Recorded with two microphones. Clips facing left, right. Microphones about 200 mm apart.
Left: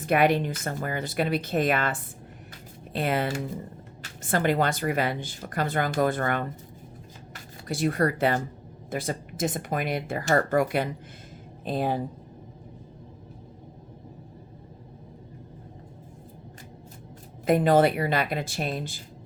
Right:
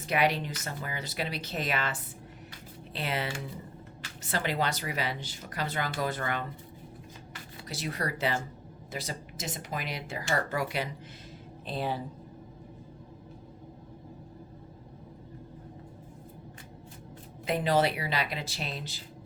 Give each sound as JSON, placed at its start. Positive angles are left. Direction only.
{"t": 0.0, "sound": "speech", "side_deg": 50}
{"t": 7.7, "sound": "speech", "side_deg": 50}
{"t": 17.4, "sound": "speech", "side_deg": 50}